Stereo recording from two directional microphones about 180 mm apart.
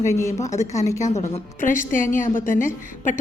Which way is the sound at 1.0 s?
40° left (ahead or behind).